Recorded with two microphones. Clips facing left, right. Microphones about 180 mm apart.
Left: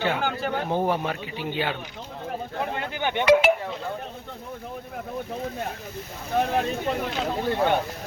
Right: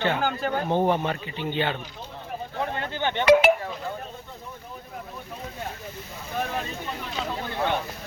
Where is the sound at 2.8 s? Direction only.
15° left (ahead or behind).